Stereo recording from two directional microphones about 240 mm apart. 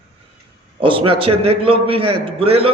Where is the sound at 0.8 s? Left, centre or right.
Right.